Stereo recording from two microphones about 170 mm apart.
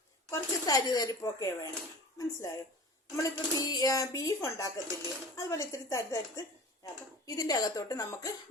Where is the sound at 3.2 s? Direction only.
20° left (ahead or behind).